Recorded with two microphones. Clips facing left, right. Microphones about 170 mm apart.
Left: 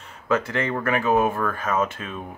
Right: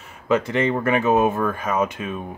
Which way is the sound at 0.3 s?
20° right (ahead or behind).